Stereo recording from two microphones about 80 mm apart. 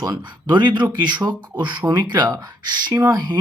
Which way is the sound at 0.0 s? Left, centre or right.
Right.